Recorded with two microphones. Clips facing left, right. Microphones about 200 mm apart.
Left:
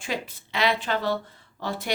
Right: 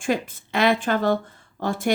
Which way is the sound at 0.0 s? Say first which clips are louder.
Right 7 dB; 50° right (ahead or behind).